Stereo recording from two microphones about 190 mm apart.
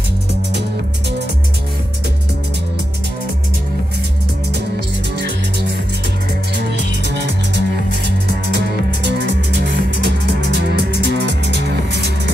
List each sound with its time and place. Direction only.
6.5 s music: 60° right (ahead or behind)
9.1 s music: 65° right (ahead or behind)